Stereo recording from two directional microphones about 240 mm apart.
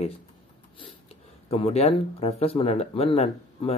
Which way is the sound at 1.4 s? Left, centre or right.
Left.